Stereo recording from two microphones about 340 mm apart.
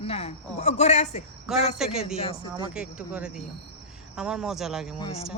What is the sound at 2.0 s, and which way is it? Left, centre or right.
Speech, centre.